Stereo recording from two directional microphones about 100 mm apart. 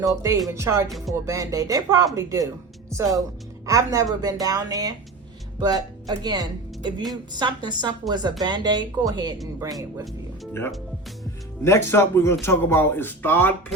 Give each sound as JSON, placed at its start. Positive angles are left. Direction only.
{"t": 0.0, "sound": "speech", "side_deg": -35}
{"t": 0.9, "sound": "music", "side_deg": 0}
{"t": 1.1, "sound": "a woman's voice", "side_deg": -30}
{"t": 11.6, "sound": "speech", "side_deg": 25}